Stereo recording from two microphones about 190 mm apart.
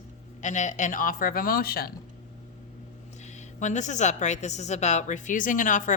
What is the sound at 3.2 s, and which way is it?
A woman's voice, 40° left (ahead or behind).